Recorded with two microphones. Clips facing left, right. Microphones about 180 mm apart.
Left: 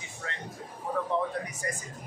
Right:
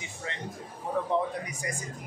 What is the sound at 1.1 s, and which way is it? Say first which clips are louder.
Speech: right 1 dB; 15° right (ahead or behind).